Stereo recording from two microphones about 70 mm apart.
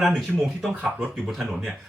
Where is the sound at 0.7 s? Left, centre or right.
Centre.